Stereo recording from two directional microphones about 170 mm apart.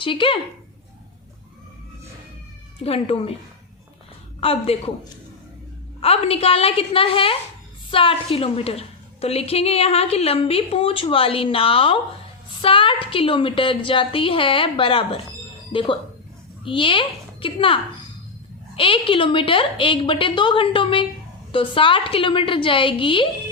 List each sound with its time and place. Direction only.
0.0 s a woman's voice: 30° left (ahead or behind)
2.8 s a woman's voice: 35° left (ahead or behind)
4.4 s a woman's voice: 35° left (ahead or behind)
6.0 s a woman's voice: 35° left (ahead or behind)
18.8 s a woman's voice: 30° left (ahead or behind)